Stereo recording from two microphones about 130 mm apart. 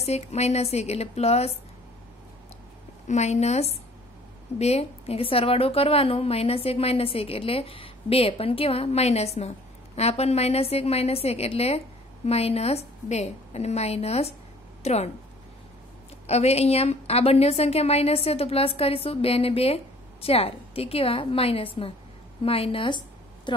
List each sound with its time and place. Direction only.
0.0 s speech: 55° left (ahead or behind)
3.1 s a woman's voice: 60° left (ahead or behind)
16.3 s a woman's voice: 55° left (ahead or behind); by 23.5 s 35° left (ahead or behind)